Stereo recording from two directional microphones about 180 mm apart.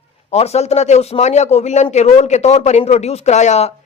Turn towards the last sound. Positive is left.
turn(degrees=40)  # may be behind; listen again after turning